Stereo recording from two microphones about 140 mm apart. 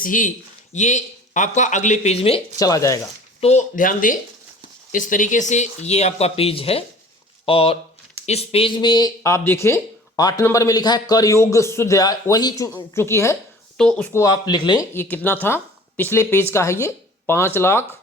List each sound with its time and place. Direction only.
0.0 s speech: 70° left (ahead or behind); by 2.4 s 45° left (ahead or behind)
2.6 s a man's voice: 25° left (ahead or behind)
3.4 s a man's voice: 55° left (ahead or behind); by 13.3 s 20° left (ahead or behind)
13.7 s speech: 5° left (ahead or behind)
14.2 s speech: 30° left (ahead or behind)
14.9 s speech: 15° left (ahead or behind)